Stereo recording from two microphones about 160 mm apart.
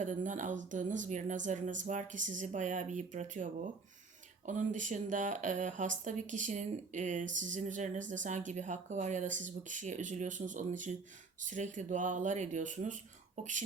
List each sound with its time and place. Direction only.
0.0 s speech: 50° right (ahead or behind)